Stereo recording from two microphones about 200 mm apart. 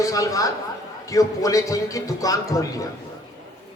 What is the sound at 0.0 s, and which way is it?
A man's voice, 15° left (ahead or behind).